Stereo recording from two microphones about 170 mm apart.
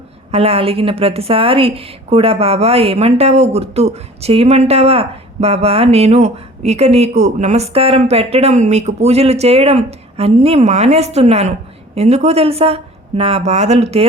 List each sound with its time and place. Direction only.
0.3 s a woman's voice: 35° right (ahead or behind)